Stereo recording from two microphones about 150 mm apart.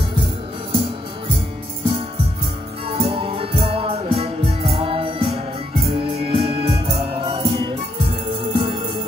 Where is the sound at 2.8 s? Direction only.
40° right (ahead or behind).